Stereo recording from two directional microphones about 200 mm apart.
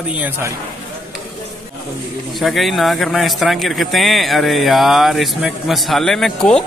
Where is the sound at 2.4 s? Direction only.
Centre (ahead or behind).